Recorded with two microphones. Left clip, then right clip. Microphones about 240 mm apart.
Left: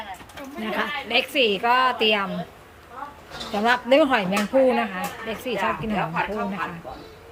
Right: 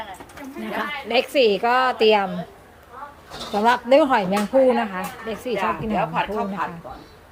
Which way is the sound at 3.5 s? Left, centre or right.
Centre.